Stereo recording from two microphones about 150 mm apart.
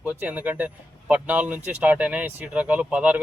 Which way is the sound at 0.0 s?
10° right (ahead or behind).